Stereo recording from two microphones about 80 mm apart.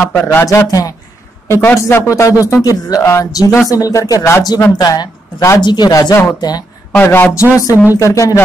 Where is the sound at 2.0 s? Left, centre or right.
Left.